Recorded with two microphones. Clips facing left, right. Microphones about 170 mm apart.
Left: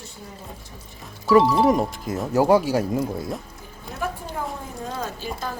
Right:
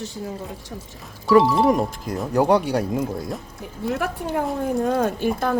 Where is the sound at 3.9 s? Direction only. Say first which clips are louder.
Right 5 dB; 70° right (ahead or behind).